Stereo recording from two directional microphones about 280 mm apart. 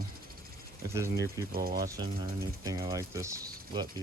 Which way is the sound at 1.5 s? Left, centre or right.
Right.